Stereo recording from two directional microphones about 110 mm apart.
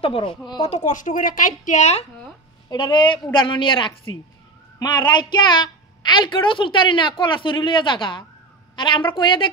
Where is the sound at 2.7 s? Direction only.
45° left (ahead or behind).